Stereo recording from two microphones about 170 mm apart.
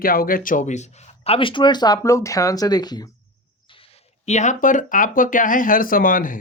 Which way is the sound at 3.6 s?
35° left (ahead or behind).